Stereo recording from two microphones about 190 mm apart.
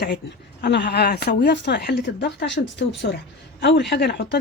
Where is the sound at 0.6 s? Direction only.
65° left (ahead or behind).